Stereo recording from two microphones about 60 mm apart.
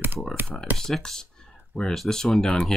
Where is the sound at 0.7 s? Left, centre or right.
Centre.